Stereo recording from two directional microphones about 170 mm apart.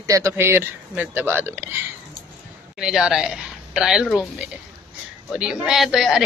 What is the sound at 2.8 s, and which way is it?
A woman's voice, 5° right (ahead or behind).